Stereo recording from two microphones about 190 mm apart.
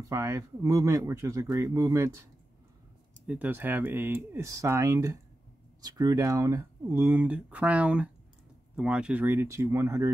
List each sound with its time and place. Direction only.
0.0 s speech: 15° right (ahead or behind)
3.3 s speech: 10° right (ahead or behind)